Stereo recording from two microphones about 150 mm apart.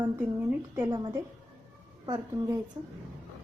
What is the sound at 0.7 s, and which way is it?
A woman's voice, 20° right (ahead or behind).